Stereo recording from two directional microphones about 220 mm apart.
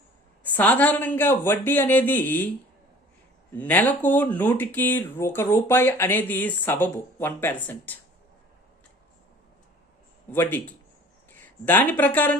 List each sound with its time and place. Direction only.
0.4 s speech: 5° left (ahead or behind)
3.5 s speech: 10° left (ahead or behind)
10.3 s speech: 10° left (ahead or behind)